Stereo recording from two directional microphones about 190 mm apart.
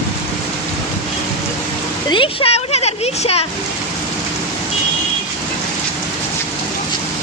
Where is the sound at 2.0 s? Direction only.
25° left (ahead or behind).